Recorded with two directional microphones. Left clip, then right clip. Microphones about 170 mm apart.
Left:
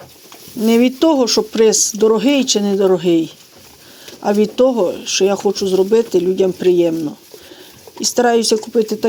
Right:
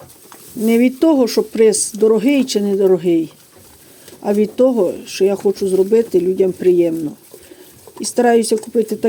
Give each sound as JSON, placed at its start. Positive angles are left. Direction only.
{"t": 0.6, "sound": "speech", "side_deg": -10}